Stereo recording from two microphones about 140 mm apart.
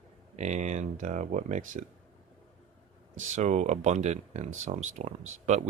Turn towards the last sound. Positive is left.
turn(degrees=-55)  # may be behind; listen again after turning